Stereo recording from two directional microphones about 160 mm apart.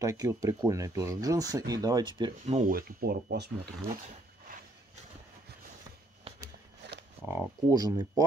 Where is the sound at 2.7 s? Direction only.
70° right (ahead or behind).